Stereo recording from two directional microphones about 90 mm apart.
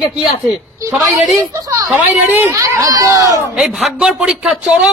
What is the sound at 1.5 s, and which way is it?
Speech, 40° right (ahead or behind).